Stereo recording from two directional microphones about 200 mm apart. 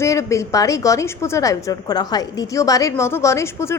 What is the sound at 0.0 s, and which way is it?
A woman's voice, 15° left (ahead or behind).